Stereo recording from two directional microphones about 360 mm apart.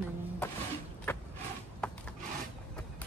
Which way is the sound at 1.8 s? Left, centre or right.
Centre.